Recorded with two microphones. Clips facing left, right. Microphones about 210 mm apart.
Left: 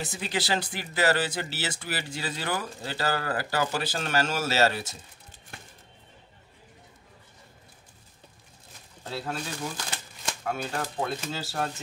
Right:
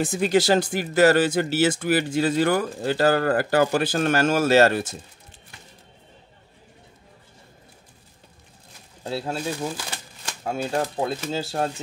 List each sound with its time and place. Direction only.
0.0 s speech: 50° right (ahead or behind)
9.0 s speech: 30° right (ahead or behind)
10.4 s speech: 30° right (ahead or behind)